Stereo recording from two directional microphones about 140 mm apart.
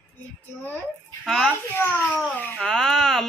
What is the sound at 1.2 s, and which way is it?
Speech, 5° left (ahead or behind).